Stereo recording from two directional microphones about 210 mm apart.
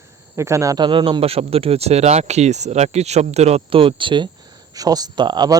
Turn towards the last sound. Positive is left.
turn(degrees=-20)  # may be behind; listen again after turning